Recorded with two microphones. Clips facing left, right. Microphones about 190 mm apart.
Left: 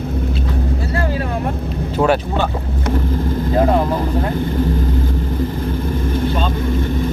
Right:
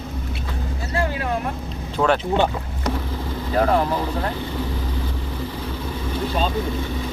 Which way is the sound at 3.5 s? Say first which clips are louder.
Left 3 dB; 20° left (ahead or behind).